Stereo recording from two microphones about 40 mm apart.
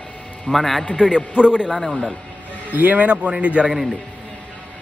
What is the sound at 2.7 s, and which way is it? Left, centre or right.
Speech, right.